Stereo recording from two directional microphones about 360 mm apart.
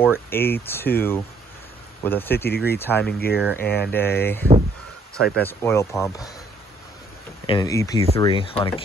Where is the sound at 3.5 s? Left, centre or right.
Left.